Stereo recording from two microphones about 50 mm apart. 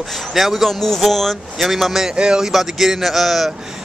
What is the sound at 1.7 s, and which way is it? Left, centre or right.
Speech, centre.